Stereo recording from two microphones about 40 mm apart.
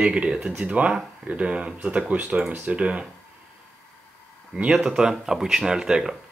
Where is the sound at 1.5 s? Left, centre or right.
Right.